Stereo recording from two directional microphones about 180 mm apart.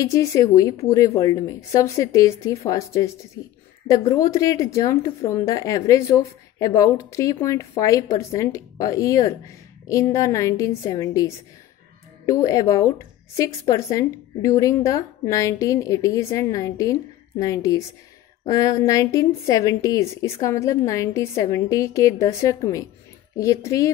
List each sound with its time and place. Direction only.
0.0 s a woman's voice: 15° left (ahead or behind)